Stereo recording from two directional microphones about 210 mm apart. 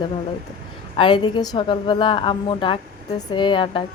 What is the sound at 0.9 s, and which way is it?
Speech, 20° left (ahead or behind).